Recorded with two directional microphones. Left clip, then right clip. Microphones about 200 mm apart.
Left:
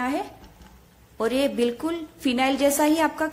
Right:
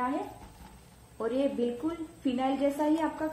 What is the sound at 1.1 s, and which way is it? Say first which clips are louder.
A man's voice: left 6 dB; 50° left (ahead or behind).